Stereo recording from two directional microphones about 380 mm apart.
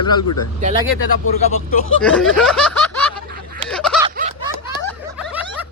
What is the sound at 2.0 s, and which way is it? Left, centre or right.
Speech, centre.